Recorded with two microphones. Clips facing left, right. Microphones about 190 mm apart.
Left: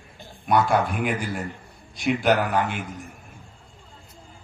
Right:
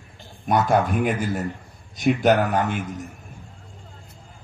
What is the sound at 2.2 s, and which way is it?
Speech, 45° right (ahead or behind).